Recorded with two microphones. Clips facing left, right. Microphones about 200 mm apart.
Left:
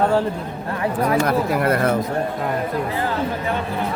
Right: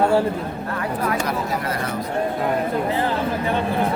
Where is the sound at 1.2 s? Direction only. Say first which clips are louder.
Left 5 dB; 55° left (ahead or behind).